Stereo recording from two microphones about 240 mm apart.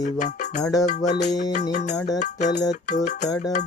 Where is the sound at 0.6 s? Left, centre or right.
Centre.